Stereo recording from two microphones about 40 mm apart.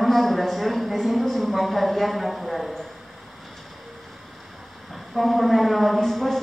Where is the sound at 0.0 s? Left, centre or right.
Centre.